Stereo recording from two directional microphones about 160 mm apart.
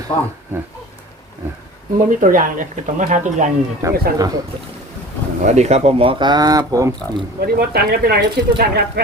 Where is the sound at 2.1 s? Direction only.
55° right (ahead or behind).